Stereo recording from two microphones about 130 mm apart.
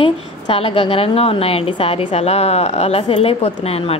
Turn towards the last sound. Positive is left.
turn(degrees=50)  # may be behind; listen again after turning